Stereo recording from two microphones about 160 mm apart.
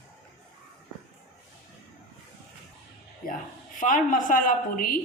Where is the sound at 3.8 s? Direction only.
55° left (ahead or behind).